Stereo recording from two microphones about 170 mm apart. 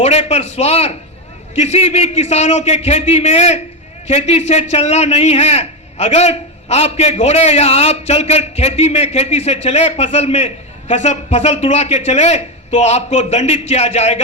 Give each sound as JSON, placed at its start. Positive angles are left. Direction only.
{"t": 0.0, "sound": "a man's voice", "side_deg": 35}